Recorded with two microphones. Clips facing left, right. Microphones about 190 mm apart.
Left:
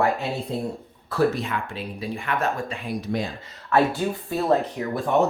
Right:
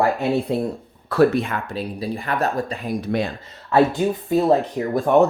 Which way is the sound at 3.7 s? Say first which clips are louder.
Right 4 dB; 20° right (ahead or behind).